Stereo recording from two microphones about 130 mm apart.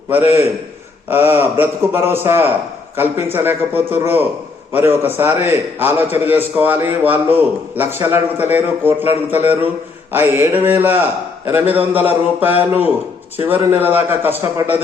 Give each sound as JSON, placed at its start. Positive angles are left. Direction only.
{"t": 0.1, "sound": "speech", "side_deg": -15}
{"t": 10.1, "sound": "speech", "side_deg": -20}